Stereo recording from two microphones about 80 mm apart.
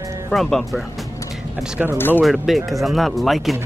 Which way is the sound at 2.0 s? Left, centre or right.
Left.